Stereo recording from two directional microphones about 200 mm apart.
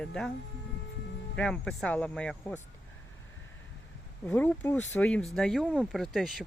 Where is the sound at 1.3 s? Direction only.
5° left (ahead or behind).